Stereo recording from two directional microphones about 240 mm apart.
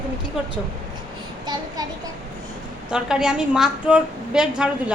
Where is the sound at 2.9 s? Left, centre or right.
Centre.